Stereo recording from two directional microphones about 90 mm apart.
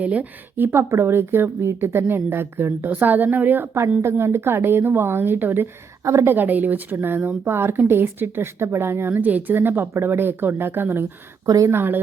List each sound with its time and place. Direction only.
0.0 s a woman's voice: 15° right (ahead or behind)
11.4 s speech: 40° right (ahead or behind)
11.7 s a woman's voice: 25° right (ahead or behind)